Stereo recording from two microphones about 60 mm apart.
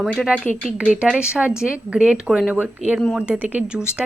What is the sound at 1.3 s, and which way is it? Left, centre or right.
Speech, centre.